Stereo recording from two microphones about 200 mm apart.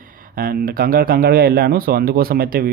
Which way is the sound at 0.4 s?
50° right (ahead or behind).